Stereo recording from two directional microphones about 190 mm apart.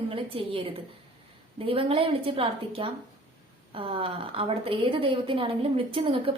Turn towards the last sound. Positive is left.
turn(degrees=-30)  # may be behind; listen again after turning